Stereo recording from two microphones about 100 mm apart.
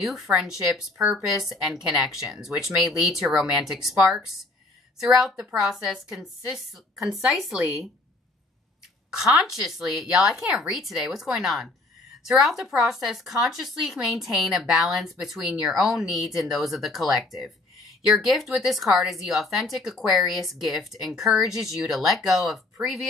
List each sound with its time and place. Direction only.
0.0 s speech: 5° right (ahead or behind)
9.2 s speech: 5° right (ahead or behind)